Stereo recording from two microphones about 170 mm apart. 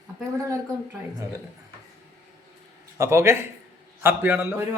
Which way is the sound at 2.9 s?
15° right (ahead or behind).